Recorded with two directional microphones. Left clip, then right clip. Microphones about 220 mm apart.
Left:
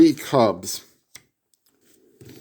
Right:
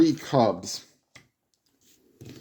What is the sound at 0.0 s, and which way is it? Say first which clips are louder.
Speech: left 5 dB; 30° left (ahead or behind).